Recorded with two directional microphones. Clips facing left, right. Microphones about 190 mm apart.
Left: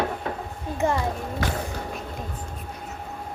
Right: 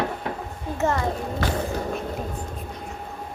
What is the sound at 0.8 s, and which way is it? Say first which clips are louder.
Speech: even; 15° left (ahead or behind).